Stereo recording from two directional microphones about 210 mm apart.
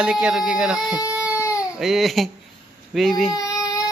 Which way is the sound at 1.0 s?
15° left (ahead or behind).